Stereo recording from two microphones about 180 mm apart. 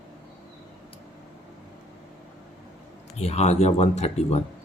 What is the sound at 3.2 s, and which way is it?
Speech, 35° left (ahead or behind).